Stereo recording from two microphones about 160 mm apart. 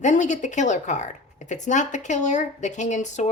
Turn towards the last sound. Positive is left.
turn(degrees=50)  # may be behind; listen again after turning